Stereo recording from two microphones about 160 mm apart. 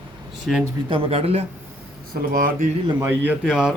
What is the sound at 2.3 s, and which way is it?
Speech, 65° right (ahead or behind).